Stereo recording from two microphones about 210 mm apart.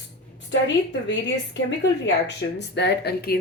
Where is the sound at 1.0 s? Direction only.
60° left (ahead or behind).